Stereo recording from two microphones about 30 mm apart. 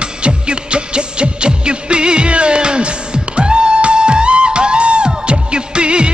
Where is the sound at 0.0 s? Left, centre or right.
Right.